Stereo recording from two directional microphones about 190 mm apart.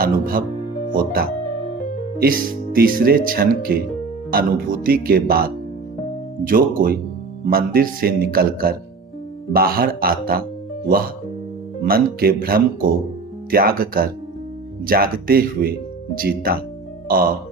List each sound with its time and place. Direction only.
0.0 s speech: 50° right (ahead or behind)